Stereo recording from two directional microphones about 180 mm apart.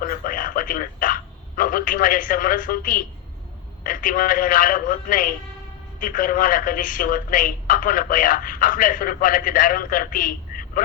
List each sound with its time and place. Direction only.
0.0 s a man's voice: 50° left (ahead or behind)